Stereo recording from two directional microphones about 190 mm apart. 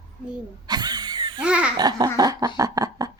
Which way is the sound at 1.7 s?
20° right (ahead or behind).